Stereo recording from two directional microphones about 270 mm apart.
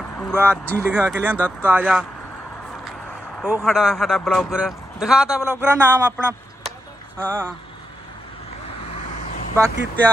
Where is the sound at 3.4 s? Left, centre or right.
Centre.